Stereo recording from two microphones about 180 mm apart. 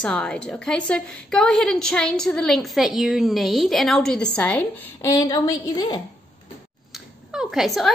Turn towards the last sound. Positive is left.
turn(degrees=0)  # may be behind; listen again after turning